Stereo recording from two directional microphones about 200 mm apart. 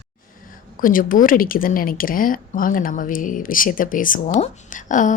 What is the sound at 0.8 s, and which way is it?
A woman's voice, 45° left (ahead or behind).